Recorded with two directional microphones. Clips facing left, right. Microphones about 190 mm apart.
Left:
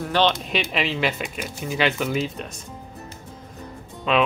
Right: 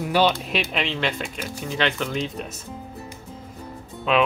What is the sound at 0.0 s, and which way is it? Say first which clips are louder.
Speech: right 1 dB; 10° right (ahead or behind).